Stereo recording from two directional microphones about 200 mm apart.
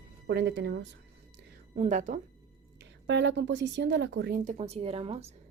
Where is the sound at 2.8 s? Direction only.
65° right (ahead or behind).